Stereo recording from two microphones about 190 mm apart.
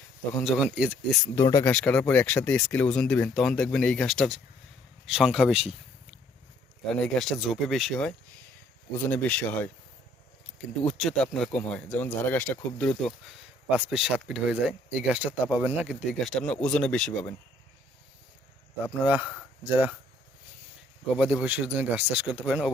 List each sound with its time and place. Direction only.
0.4 s speech: 5° right (ahead or behind)
1.4 s speech: 15° left (ahead or behind)
1.7 s speech: 5° left (ahead or behind)
10.8 s speech: centre (ahead or behind)
13.7 s speech: 10° right (ahead or behind)
19.0 s speech: 10° right (ahead or behind)
21.4 s speech: 10° right (ahead or behind)